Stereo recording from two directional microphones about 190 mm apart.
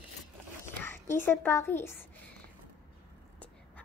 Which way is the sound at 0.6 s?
10° left (ahead or behind).